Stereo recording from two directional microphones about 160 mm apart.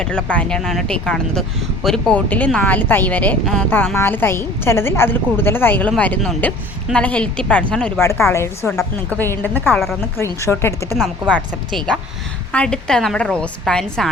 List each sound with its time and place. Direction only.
0.0 s a woman's voice: 5° left (ahead or behind)
10.9 s speech: centre (ahead or behind)